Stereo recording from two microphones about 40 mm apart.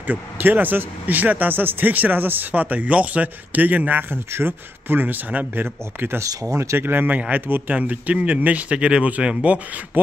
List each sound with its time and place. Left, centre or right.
0.0 s speech: right
4.1 s speech: right
5.6 s speech: right
7.2 s speech: right
7.4 s speech: right